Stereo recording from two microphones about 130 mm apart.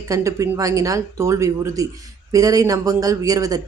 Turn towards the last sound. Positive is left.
turn(degrees=-30)  # may be behind; listen again after turning